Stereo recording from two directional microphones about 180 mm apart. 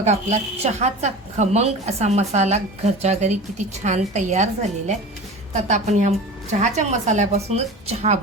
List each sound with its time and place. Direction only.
0.0 s a woman's voice: 35° right (ahead or behind)
5.5 s a woman's voice: 40° right (ahead or behind)